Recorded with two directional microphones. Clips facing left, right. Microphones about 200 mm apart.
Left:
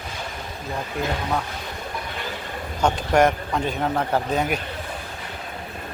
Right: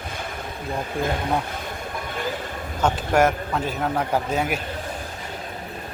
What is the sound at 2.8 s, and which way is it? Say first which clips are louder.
A man's voice: left 1 dB; 5° right (ahead or behind).